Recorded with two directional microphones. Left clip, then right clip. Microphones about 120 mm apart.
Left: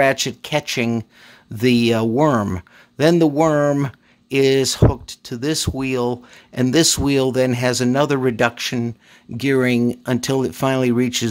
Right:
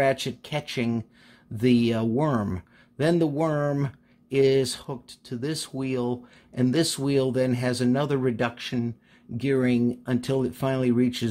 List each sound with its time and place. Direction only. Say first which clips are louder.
0.0 s speech: left 7 dB; 40° left (ahead or behind)